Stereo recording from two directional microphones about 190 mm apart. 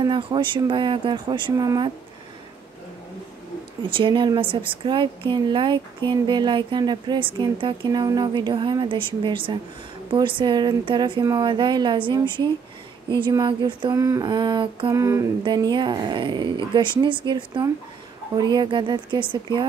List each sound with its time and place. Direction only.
0.0 s speech: 25° right (ahead or behind)
3.9 s speech: 25° right (ahead or behind)